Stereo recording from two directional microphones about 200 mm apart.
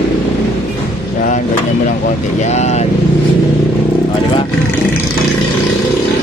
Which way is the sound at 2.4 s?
35° left (ahead or behind).